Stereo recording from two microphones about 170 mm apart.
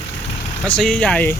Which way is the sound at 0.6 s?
5° left (ahead or behind).